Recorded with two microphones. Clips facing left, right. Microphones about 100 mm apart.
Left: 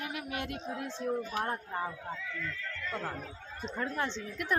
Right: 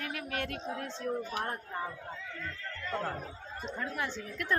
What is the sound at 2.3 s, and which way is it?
Speech, 35° right (ahead or behind).